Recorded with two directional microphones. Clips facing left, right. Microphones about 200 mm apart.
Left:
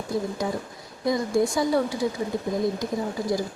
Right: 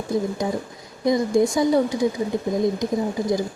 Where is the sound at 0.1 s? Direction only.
20° right (ahead or behind).